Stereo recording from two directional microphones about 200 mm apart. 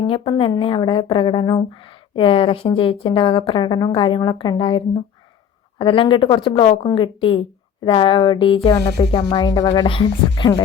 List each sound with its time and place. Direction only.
0.1 s a woman's voice: 25° left (ahead or behind)